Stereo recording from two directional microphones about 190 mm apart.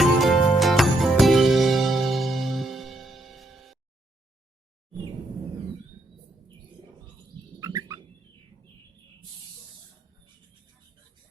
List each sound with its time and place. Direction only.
0.0 s music: centre (ahead or behind)
7.6 s bird: 15° right (ahead or behind)